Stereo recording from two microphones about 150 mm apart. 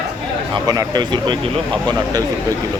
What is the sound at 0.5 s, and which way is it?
Speech, 25° right (ahead or behind).